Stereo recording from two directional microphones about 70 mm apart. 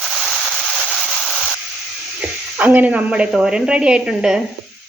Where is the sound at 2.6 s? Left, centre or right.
Right.